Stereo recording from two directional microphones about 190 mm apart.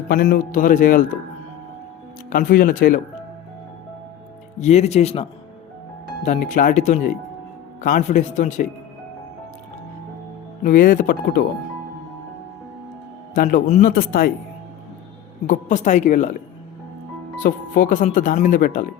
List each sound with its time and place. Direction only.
0.1 s speech: 50° left (ahead or behind)
2.3 s speech: 50° left (ahead or behind)
4.6 s a woman's voice: 35° left (ahead or behind)
10.6 s speech: 45° left (ahead or behind)
13.3 s speech: 45° left (ahead or behind)
15.4 s a woman's voice: 40° left (ahead or behind)
17.4 s speech: 45° left (ahead or behind)